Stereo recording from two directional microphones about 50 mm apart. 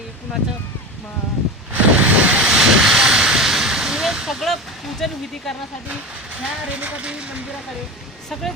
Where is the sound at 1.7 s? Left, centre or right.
Right.